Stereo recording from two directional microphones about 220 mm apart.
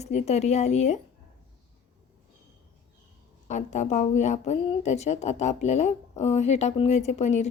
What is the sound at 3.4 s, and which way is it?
Speech, 35° left (ahead or behind).